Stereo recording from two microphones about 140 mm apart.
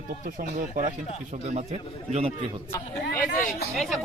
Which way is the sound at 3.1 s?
90° left.